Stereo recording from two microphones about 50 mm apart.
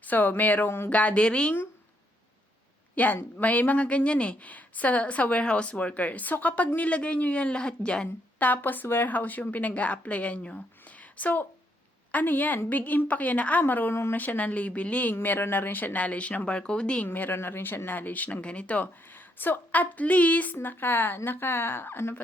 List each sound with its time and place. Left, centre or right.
0.0 s a woman's voice: left
2.9 s a woman's voice: left
8.0 s speech: left
15.1 s a woman's voice: left
17.1 s speech: left
19.1 s a woman's voice: left
20.6 s speech: left